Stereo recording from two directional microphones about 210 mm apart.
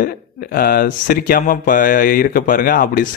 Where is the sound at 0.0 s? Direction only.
45° left (ahead or behind).